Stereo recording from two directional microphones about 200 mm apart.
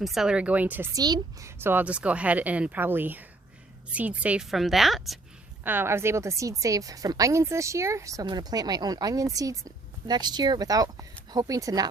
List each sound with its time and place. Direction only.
0.0 s a woman's voice: centre (ahead or behind)
5.6 s a woman's voice: 10° right (ahead or behind)